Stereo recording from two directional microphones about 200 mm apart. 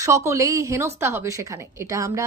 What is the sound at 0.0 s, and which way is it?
Speech, 15° right (ahead or behind).